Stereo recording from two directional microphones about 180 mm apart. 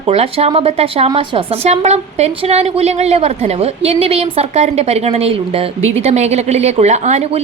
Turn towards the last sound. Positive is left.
turn(degrees=-40)  # may be behind; listen again after turning